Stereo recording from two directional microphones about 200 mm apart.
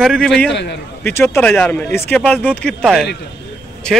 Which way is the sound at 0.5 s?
60° left (ahead or behind).